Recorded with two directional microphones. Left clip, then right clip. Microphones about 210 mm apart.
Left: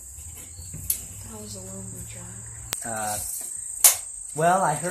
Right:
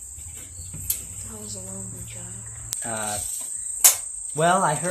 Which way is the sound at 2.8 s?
30° right (ahead or behind).